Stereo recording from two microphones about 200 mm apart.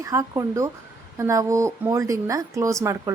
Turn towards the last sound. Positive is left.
turn(degrees=-15)  # may be behind; listen again after turning